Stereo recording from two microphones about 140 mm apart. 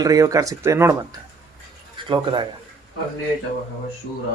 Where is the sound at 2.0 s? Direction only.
35° right (ahead or behind).